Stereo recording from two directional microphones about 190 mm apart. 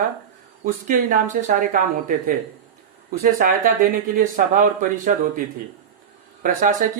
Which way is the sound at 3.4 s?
50° right (ahead or behind).